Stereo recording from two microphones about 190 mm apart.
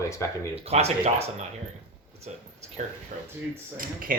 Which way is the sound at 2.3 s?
35° right (ahead or behind).